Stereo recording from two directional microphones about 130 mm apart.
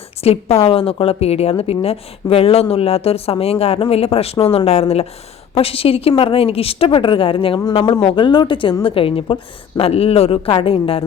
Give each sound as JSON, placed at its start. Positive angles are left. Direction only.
{"t": 0.2, "sound": "a woman's voice", "side_deg": 50}